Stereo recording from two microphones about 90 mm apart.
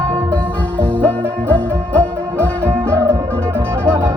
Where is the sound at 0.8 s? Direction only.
15° left (ahead or behind).